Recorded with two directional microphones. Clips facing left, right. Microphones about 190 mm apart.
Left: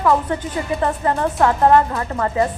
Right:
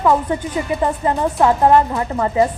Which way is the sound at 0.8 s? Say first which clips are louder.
Even; 15° right (ahead or behind).